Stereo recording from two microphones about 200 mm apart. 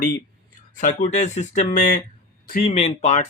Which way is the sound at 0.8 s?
35° left (ahead or behind).